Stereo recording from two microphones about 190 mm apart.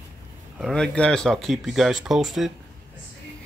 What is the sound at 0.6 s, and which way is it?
Speech, centre (ahead or behind).